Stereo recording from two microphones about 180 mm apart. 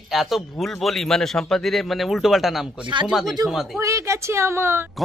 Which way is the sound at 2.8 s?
25° right (ahead or behind).